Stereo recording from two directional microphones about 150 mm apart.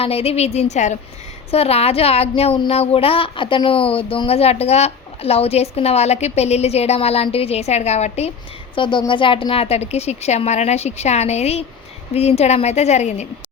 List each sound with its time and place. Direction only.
0.0 s a woman's voice: 40° left (ahead or behind)
8.7 s speech: 35° left (ahead or behind); by 13.2 s 50° left (ahead or behind)